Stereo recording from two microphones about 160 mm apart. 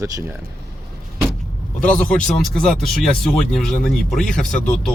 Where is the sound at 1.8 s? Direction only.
5° left (ahead or behind).